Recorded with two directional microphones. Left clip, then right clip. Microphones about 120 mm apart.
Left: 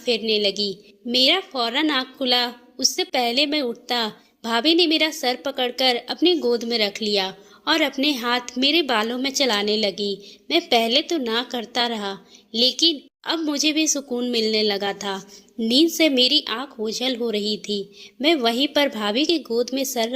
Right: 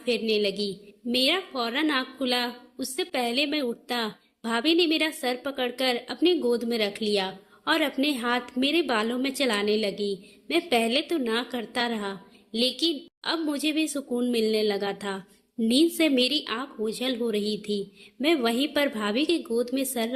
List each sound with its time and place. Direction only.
0.0 s a woman's voice: 25° left (ahead or behind)